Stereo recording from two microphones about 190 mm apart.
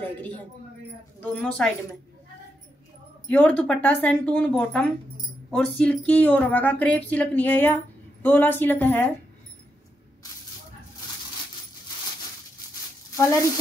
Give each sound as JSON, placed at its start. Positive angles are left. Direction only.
{"t": 0.0, "sound": "a woman's voice", "side_deg": 10}
{"t": 3.3, "sound": "speech", "side_deg": 5}
{"t": 13.1, "sound": "speech", "side_deg": 15}